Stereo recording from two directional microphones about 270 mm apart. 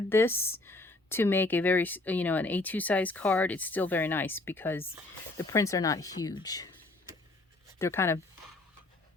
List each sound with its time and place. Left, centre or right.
0.1 s speech: centre
7.8 s speech: centre